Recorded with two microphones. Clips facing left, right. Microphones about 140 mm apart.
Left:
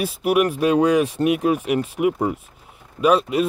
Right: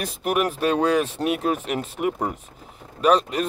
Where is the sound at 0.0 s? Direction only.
10° left (ahead or behind).